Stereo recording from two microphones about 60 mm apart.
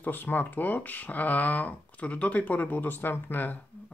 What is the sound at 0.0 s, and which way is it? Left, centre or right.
Speech, left.